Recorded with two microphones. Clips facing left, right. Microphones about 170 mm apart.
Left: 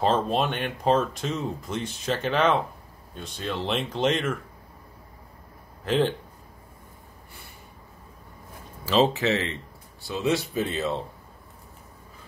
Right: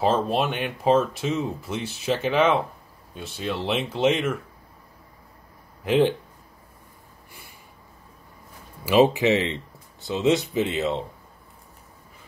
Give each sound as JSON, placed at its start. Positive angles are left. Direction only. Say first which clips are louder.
{"t": 0.0, "sound": "speech", "louder": "right 1 dB", "side_deg": -5}
{"t": 5.9, "sound": "speech", "louder": "right 4 dB", "side_deg": -10}
{"t": 8.8, "sound": "speech", "louder": "right 4 dB", "side_deg": -15}